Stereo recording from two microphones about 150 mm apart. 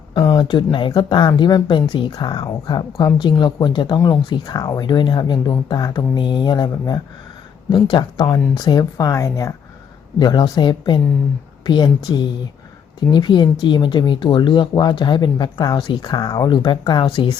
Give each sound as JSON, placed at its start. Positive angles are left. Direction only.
{"t": 0.1, "sound": "a woman's voice", "side_deg": 30}
{"t": 13.1, "sound": "speech", "side_deg": 30}